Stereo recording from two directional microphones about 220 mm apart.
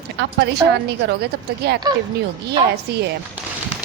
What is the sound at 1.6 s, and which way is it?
Speech, 45° right (ahead or behind).